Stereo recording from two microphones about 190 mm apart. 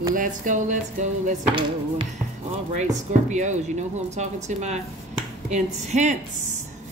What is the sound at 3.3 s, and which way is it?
Speech, 40° right (ahead or behind).